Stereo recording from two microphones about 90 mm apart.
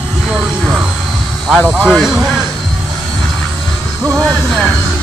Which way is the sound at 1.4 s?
Centre (ahead or behind).